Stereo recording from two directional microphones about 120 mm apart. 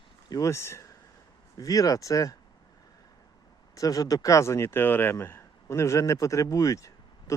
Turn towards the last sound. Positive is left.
turn(degrees=25)  # may be behind; listen again after turning